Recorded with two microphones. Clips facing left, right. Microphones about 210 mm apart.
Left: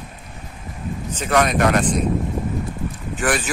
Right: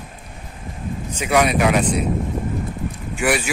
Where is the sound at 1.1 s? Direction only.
10° right (ahead or behind).